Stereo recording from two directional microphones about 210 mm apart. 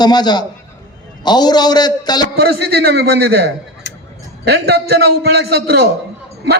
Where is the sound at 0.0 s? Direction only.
20° left (ahead or behind).